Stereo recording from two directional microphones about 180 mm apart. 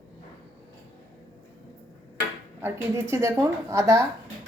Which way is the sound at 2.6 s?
15° right (ahead or behind).